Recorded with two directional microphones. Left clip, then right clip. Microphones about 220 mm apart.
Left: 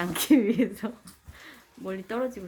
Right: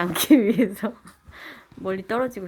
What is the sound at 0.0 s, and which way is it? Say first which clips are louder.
A woman's voice: right 5 dB; 25° right (ahead or behind).